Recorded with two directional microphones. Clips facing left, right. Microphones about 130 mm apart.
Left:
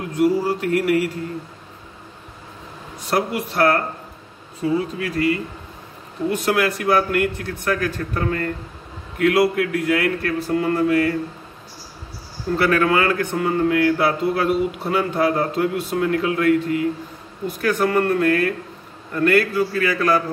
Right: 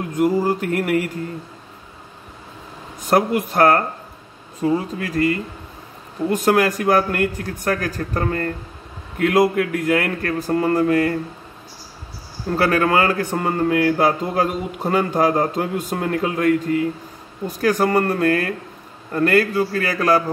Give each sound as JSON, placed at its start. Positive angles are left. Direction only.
{"t": 0.1, "sound": "speech", "side_deg": -50}
{"t": 3.1, "sound": "speech", "side_deg": -50}
{"t": 6.3, "sound": "speech", "side_deg": -45}
{"t": 12.5, "sound": "speech", "side_deg": -40}